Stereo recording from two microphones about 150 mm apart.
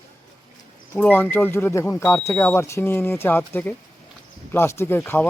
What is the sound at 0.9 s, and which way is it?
Speech, 10° left (ahead or behind).